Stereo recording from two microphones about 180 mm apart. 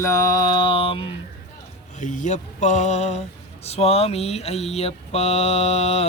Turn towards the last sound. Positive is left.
turn(degrees=35)  # may be behind; listen again after turning